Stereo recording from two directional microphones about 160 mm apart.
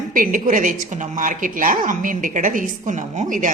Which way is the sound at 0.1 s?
60° right (ahead or behind).